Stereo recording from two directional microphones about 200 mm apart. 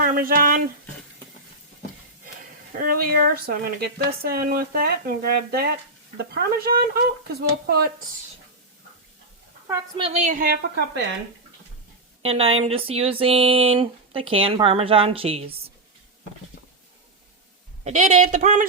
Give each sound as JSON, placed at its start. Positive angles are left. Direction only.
{"t": 0.0, "sound": "speech", "side_deg": -45}
{"t": 2.7, "sound": "speech", "side_deg": -45}
{"t": 10.0, "sound": "a woman's voice", "side_deg": -30}
{"t": 12.2, "sound": "speech", "side_deg": -30}
{"t": 17.8, "sound": "a woman's voice", "side_deg": -35}